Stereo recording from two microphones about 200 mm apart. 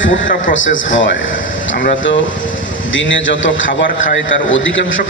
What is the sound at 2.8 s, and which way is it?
A man's voice, 70° left (ahead or behind).